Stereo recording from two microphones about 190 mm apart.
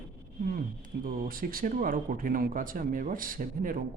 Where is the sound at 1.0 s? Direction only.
50° right (ahead or behind).